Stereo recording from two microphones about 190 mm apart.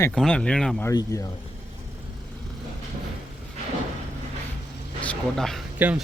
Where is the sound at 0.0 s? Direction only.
5° left (ahead or behind).